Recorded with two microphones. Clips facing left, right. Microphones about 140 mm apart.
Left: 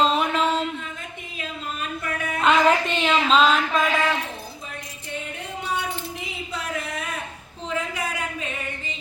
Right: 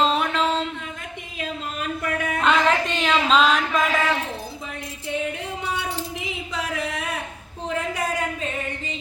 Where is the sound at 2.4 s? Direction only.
5° left (ahead or behind).